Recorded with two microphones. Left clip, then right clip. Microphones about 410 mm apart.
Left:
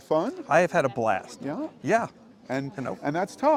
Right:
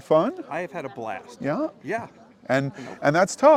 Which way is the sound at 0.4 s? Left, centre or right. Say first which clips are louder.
Left 10 dB; left.